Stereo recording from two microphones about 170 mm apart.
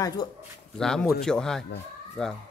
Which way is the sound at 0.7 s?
5° left (ahead or behind).